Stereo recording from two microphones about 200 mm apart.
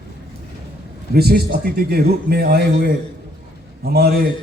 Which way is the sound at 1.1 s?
50° right (ahead or behind).